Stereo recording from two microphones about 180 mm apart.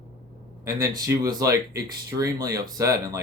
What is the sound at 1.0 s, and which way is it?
Speech, 20° right (ahead or behind).